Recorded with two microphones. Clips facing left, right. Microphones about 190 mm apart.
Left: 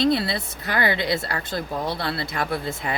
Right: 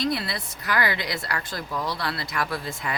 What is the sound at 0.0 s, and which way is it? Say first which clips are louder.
Speech: left 6 dB; 25° left (ahead or behind).